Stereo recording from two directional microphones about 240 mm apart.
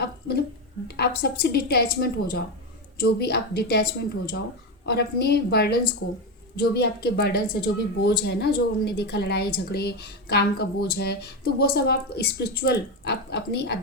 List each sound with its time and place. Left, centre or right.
0.0 s a woman's voice: left